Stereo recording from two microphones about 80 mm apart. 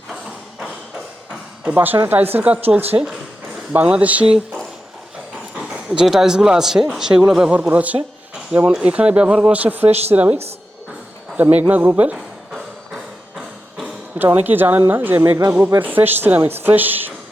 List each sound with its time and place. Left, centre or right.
1.6 s speech: right
5.7 s speech: centre
11.5 s speech: right
12.1 s music: centre
14.3 s speech: right